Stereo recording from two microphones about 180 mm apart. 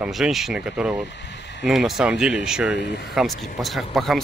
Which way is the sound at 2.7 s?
70° left (ahead or behind).